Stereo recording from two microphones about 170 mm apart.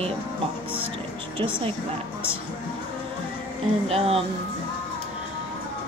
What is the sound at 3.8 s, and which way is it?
Speech, 35° right (ahead or behind).